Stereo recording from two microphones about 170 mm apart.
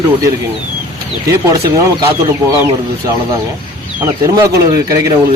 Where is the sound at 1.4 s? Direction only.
20° right (ahead or behind).